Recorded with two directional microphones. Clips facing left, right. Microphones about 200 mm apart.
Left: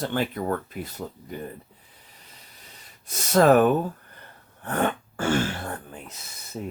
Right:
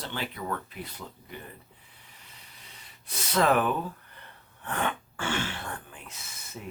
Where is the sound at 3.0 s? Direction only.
45° left (ahead or behind).